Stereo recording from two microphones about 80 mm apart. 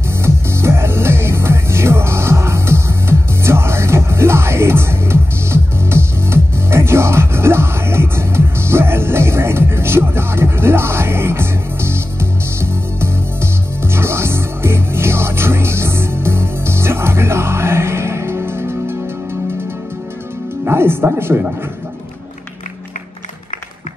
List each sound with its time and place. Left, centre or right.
0.2 s music: right
20.6 s music: right